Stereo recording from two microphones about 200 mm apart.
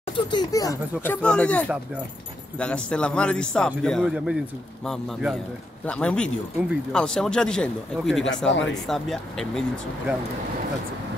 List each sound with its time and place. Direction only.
0.1 s speech: 20° left (ahead or behind); by 10.1 s centre (ahead or behind)